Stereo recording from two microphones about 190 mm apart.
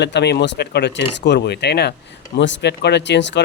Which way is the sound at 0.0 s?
60° left (ahead or behind).